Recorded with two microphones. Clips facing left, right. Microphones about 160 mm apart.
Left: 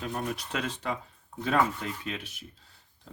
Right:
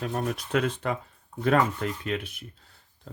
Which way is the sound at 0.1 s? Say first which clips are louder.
Right 7 dB; 50° right (ahead or behind).